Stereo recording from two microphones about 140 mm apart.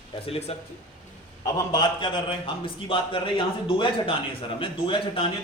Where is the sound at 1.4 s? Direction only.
25° left (ahead or behind).